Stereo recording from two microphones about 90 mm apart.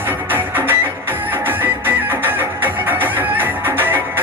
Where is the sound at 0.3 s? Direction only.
20° right (ahead or behind).